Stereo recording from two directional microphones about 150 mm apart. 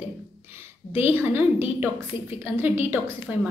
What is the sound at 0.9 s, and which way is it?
A woman's voice, 15° right (ahead or behind).